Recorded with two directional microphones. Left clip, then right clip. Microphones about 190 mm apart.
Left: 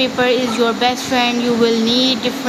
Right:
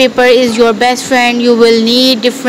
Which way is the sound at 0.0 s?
30° right (ahead or behind).